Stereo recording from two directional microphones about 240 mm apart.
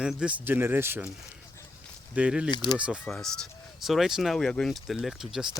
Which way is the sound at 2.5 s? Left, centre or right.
Centre.